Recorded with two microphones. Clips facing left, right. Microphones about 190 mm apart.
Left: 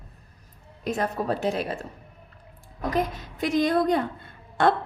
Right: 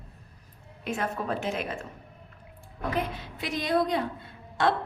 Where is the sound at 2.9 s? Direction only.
40° left (ahead or behind).